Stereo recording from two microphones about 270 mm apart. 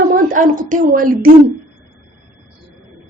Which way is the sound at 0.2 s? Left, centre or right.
Right.